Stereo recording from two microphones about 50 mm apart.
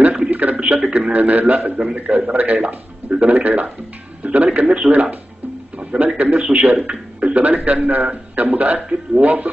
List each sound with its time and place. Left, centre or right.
0.3 s a man's voice: right
1.8 s a man's voice: right
4.2 s music: right
4.6 s a man's voice: right
5.8 s a sound: right
6.1 s a man's voice: right